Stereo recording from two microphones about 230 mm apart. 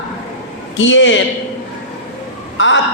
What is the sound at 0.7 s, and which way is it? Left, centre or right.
Speech, left.